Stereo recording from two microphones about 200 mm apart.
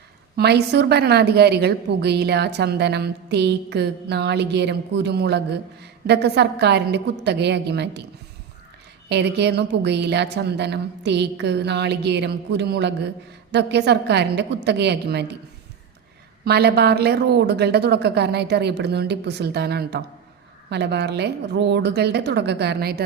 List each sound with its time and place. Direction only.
0.3 s a woman's voice: 55° right (ahead or behind)
9.0 s a woman's voice: 55° right (ahead or behind)
16.4 s a woman's voice: 50° right (ahead or behind)